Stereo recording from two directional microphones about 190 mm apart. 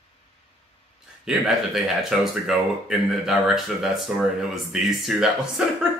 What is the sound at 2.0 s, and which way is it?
Speech, centre (ahead or behind).